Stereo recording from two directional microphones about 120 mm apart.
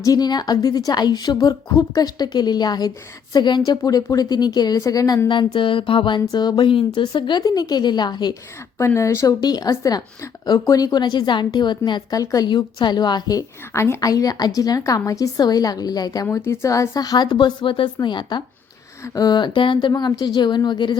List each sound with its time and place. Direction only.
0.0 s speech: 30° left (ahead or behind)
8.8 s a woman's voice: 25° left (ahead or behind)
16.2 s speech: 20° left (ahead or behind); by 20.9 s 40° left (ahead or behind)